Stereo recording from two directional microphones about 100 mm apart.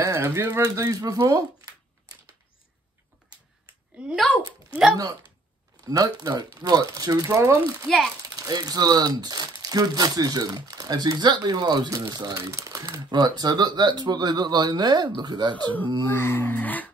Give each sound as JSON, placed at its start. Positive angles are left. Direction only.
{"t": 0.0, "sound": "rattle", "side_deg": -30}
{"t": 0.5, "sound": "speech", "side_deg": -40}
{"t": 4.4, "sound": "speech", "side_deg": 55}
{"t": 5.9, "sound": "speech", "side_deg": -40}
{"t": 8.4, "sound": "speech", "side_deg": -40}
{"t": 16.1, "sound": "music", "side_deg": 25}